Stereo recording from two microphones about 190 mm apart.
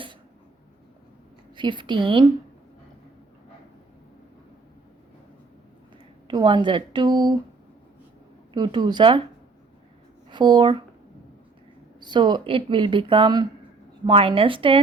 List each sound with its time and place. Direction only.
1.5 s speech: 25° right (ahead or behind)
6.2 s speech: 25° right (ahead or behind)
8.5 s speech: 25° right (ahead or behind)
10.2 s speech: 25° right (ahead or behind)
11.9 s speech: 25° right (ahead or behind)